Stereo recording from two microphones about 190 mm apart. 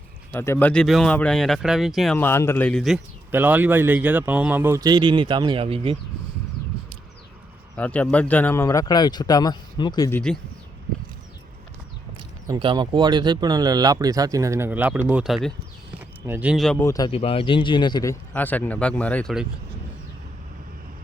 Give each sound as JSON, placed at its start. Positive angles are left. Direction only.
{"t": 0.3, "sound": "speech", "side_deg": 15}
{"t": 2.1, "sound": "speech", "side_deg": 10}
{"t": 7.8, "sound": "speech", "side_deg": 5}
{"t": 12.5, "sound": "speech", "side_deg": -25}
{"t": 16.8, "sound": "speech", "side_deg": 20}
{"t": 17.1, "sound": "speech", "side_deg": 30}